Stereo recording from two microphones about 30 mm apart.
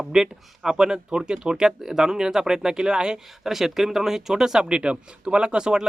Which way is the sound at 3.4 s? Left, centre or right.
Centre.